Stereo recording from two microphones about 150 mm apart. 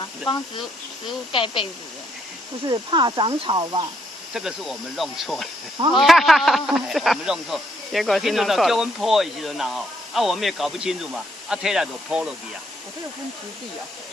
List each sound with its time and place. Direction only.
1.3 s speech: 35° left (ahead or behind)
2.6 s speech: 30° right (ahead or behind)
4.3 s speech: 5° right (ahead or behind)